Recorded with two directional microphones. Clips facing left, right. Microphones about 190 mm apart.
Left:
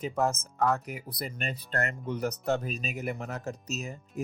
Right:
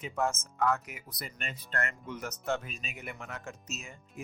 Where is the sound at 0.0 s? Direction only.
35° left (ahead or behind).